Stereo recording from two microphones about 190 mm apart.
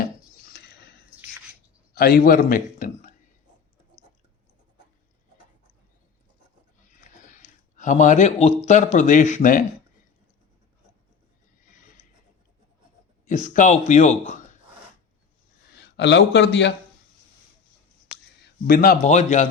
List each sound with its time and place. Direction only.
0.5 s a sound: 55° left (ahead or behind)
2.0 s a man's voice: 50° left (ahead or behind)
7.3 s a man's voice: 40° left (ahead or behind)
11.6 s a sound: 40° left (ahead or behind)
13.2 s speech: 40° left (ahead or behind)
16.0 s a man's voice: 70° left (ahead or behind)
18.1 s speech: 55° left (ahead or behind); by 19.5 s 40° left (ahead or behind)